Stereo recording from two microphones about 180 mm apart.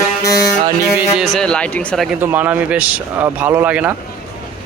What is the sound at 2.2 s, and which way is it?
Speech, 10° right (ahead or behind).